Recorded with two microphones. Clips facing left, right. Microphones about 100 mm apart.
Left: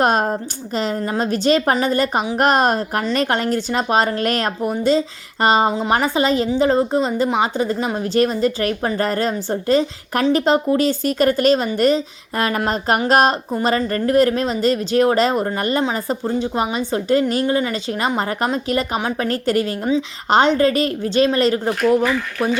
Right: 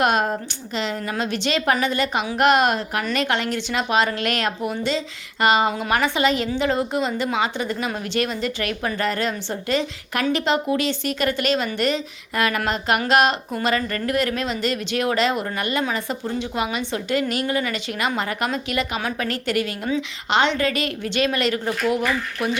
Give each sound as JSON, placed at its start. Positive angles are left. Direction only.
{"t": 0.0, "sound": "a woman's voice", "side_deg": 35}